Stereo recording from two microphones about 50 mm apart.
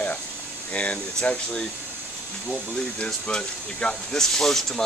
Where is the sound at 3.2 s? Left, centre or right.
Centre.